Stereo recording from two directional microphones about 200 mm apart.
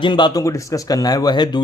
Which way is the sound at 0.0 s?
20° left (ahead or behind).